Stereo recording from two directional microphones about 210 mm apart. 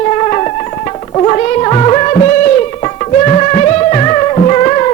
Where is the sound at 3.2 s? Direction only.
25° left (ahead or behind).